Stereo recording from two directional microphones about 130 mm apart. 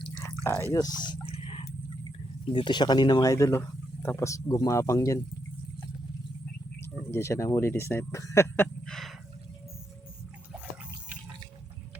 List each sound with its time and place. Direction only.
0.4 s speech: 20° left (ahead or behind); by 1.2 s 35° left (ahead or behind)
1.4 s vehicle: 45° left (ahead or behind)
2.5 s speech: 35° left (ahead or behind)
7.1 s speech: 20° left (ahead or behind)
8.9 s a sound: centre (ahead or behind)